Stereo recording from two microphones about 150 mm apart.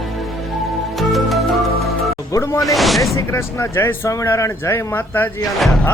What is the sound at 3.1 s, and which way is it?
Speech, 20° left (ahead or behind).